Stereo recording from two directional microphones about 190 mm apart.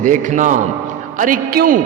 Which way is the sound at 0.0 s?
40° right (ahead or behind).